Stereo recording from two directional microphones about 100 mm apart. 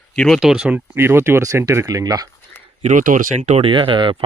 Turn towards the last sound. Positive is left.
turn(degrees=-60)  # may be behind; listen again after turning